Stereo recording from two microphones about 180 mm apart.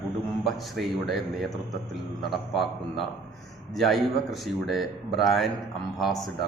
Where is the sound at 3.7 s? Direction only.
Centre (ahead or behind).